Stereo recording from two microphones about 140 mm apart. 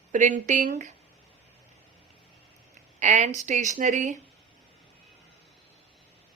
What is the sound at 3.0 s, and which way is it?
Speech, 55° right (ahead or behind).